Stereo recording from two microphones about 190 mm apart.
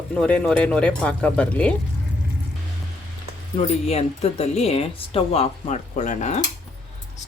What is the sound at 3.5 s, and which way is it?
A woman's voice, 35° left (ahead or behind).